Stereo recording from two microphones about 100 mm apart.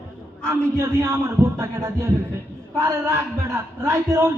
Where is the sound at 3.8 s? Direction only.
25° right (ahead or behind).